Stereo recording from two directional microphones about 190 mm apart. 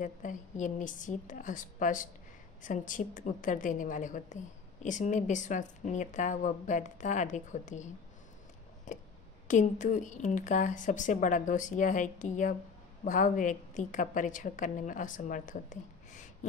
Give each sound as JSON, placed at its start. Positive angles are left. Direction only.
{"t": 0.0, "sound": "a woman's voice", "side_deg": 45}